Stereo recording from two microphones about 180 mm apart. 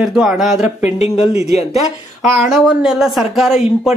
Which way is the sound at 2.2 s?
Centre (ahead or behind).